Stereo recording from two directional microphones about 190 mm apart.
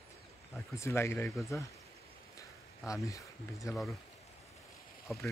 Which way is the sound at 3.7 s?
Centre (ahead or behind).